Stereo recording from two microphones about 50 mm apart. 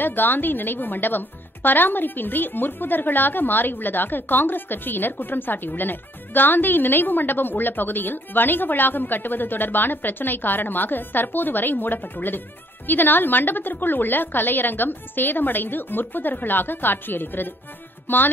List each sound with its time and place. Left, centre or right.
0.0 s speech: left
18.0 s music: left